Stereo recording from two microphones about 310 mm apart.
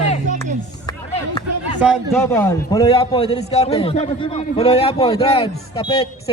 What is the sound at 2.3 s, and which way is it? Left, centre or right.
A man's voice, centre.